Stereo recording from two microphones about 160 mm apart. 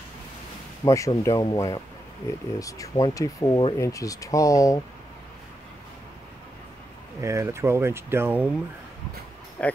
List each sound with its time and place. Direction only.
0.8 s speech: 20° left (ahead or behind)
7.2 s speech: 20° right (ahead or behind)
9.6 s speech: 10° left (ahead or behind)